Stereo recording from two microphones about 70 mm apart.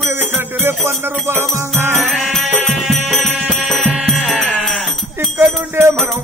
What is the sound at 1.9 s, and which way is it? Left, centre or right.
Music, centre.